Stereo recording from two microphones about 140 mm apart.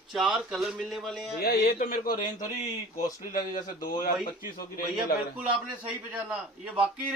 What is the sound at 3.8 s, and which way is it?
Speech, 80° left.